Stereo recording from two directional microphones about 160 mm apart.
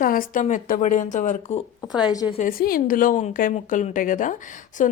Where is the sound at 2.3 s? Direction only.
60° left (ahead or behind).